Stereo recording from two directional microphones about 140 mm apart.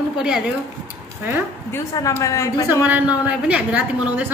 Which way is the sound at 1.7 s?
20° left (ahead or behind).